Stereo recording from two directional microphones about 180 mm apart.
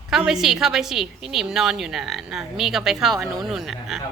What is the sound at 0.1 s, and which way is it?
A woman's voice, centre (ahead or behind).